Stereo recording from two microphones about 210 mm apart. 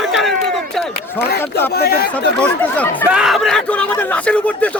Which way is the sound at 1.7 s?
50° left (ahead or behind).